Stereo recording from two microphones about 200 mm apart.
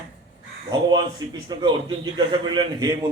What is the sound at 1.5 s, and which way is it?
A man's voice, 20° right (ahead or behind).